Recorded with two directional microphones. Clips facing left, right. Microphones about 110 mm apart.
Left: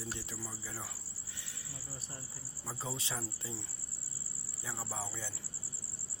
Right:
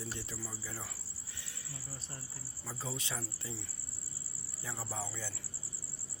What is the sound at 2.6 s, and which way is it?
Speech, 20° left (ahead or behind).